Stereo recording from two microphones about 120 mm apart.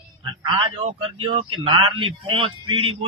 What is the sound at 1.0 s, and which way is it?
Speech, 45° right (ahead or behind).